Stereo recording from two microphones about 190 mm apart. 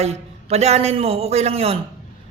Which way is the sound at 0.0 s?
35° right (ahead or behind).